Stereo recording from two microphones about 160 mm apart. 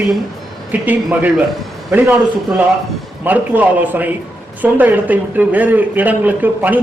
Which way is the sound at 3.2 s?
10° right (ahead or behind).